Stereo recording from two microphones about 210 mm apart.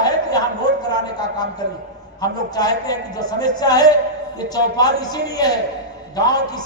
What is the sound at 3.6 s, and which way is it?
A man's voice, 20° left (ahead or behind).